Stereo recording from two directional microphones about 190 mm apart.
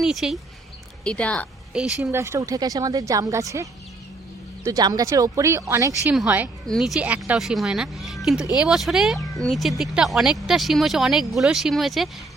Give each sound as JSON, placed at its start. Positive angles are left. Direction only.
{"t": 0.0, "sound": "speech", "side_deg": 0}
{"t": 1.7, "sound": "speech", "side_deg": -5}